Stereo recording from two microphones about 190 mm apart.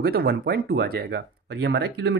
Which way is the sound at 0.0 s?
55° right (ahead or behind).